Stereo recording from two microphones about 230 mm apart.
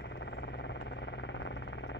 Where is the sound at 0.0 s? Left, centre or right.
Left.